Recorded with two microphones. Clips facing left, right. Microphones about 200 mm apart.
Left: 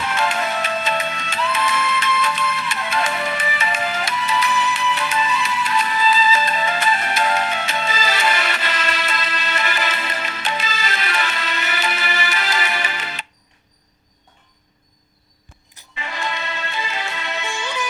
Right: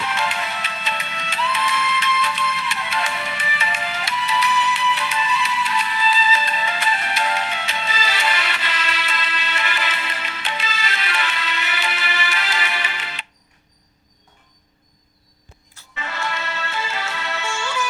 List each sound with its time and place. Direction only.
0.0 s music: 45° left (ahead or behind)
16.0 s music: 15° left (ahead or behind)